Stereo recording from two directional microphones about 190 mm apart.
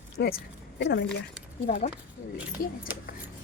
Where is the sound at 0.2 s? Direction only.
55° left (ahead or behind).